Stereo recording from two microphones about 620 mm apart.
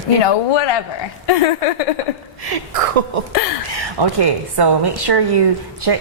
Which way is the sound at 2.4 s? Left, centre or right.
Right.